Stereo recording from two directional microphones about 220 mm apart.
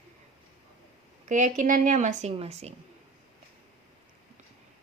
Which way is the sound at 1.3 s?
35° right (ahead or behind).